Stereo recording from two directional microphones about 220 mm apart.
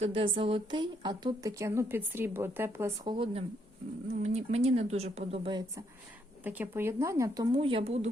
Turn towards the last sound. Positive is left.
turn(degrees=-25)  # may be behind; listen again after turning